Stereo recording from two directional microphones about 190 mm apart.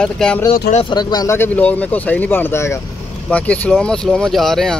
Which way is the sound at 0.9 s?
20° left (ahead or behind).